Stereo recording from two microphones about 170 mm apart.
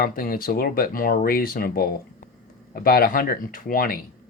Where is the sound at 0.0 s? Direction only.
60° left (ahead or behind).